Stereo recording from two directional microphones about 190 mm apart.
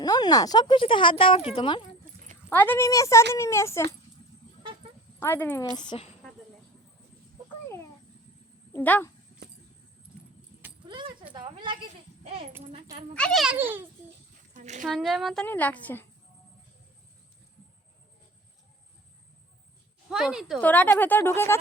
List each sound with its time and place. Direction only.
0.0 s speech: 20° left (ahead or behind)
2.5 s a woman's voice: 10° left (ahead or behind)
5.2 s a woman's voice: 10° left (ahead or behind)
5.7 s speech: 25° left (ahead or behind)
8.7 s speech: 10° left (ahead or behind)
11.3 s a sound: 25° right (ahead or behind)
13.1 s a woman's voice: 5° left (ahead or behind)
14.5 s a sound: 40° right (ahead or behind)
14.8 s a woman's voice: centre (ahead or behind)
20.1 s a woman's voice: centre (ahead or behind)
20.6 s a woman's voice: 10° left (ahead or behind)